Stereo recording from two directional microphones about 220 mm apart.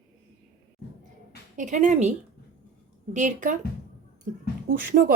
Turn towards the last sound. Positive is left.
turn(degrees=-40)  # may be behind; listen again after turning